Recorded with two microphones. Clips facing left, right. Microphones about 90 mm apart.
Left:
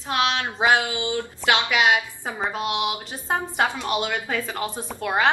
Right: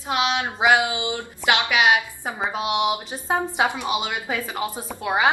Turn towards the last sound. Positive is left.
turn(degrees=-10)  # may be behind; listen again after turning